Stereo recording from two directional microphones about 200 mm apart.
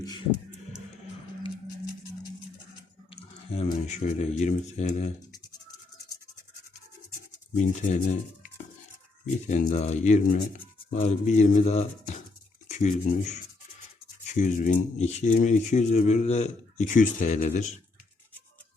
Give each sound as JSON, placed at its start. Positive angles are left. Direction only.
{"t": 3.5, "sound": "speech", "side_deg": 35}
{"t": 5.4, "sound": "scratch", "side_deg": 20}
{"t": 7.6, "sound": "speech", "side_deg": 35}
{"t": 9.5, "sound": "speech", "side_deg": 35}